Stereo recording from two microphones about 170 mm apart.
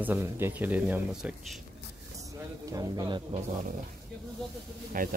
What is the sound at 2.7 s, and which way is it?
Speech, 20° right (ahead or behind).